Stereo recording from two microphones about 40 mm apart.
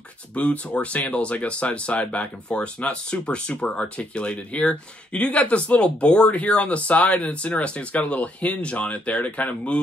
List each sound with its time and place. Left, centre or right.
0.3 s speech: left